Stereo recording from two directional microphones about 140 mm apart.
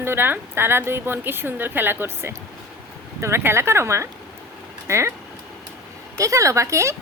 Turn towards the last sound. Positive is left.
turn(degrees=-20)  # may be behind; listen again after turning